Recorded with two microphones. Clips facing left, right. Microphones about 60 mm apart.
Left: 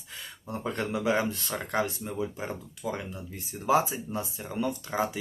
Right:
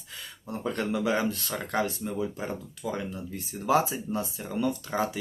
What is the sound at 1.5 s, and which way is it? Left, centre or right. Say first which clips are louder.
Speech: even; centre.